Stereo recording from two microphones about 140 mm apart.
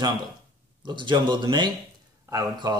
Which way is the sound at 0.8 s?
35° right (ahead or behind).